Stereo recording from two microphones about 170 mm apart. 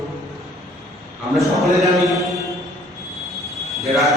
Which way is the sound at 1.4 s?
Centre (ahead or behind).